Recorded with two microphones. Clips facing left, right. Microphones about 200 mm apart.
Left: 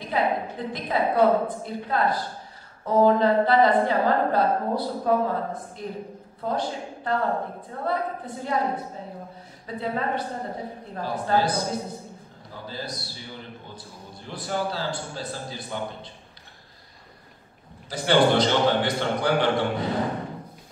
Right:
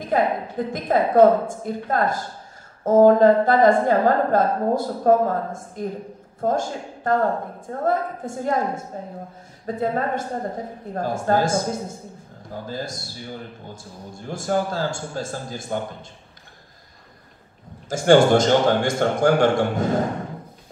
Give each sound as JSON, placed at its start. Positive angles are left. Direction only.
{"t": 0.0, "sound": "a man's voice", "side_deg": -45}
{"t": 17.8, "sound": "a man's voice", "side_deg": -45}